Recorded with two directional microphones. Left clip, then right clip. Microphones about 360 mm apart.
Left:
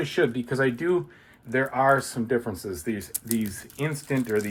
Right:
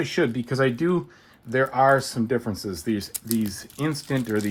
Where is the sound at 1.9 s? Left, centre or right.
Right.